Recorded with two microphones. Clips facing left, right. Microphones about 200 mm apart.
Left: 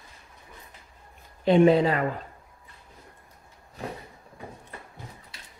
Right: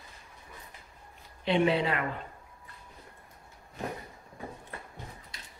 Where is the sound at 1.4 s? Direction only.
45° left (ahead or behind).